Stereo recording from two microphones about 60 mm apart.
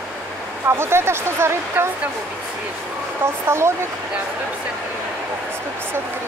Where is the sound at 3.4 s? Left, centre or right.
Right.